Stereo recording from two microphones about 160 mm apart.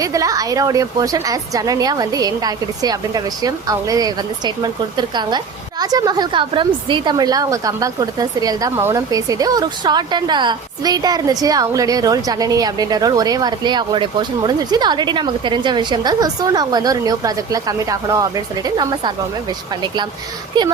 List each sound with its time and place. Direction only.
0.0 s a woman's voice: 20° right (ahead or behind)